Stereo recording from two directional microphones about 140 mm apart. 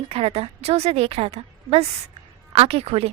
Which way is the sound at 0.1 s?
45° right (ahead or behind).